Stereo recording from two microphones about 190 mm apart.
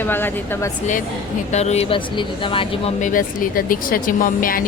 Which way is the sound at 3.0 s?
45° left (ahead or behind).